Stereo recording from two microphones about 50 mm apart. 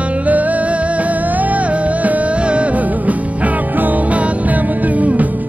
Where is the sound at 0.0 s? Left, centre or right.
Right.